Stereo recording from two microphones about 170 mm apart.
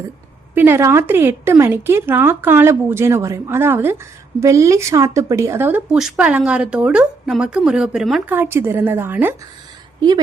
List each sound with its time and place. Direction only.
0.5 s speech: 15° right (ahead or behind)
8.4 s speech: 15° right (ahead or behind)